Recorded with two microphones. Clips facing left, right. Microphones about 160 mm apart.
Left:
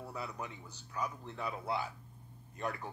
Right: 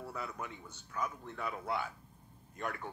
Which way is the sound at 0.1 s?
35° left (ahead or behind).